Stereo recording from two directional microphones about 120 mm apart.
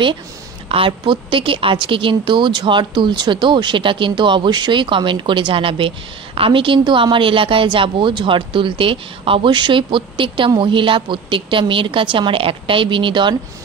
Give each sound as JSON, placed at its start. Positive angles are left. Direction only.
{"t": 0.7, "sound": "a woman's voice", "side_deg": -50}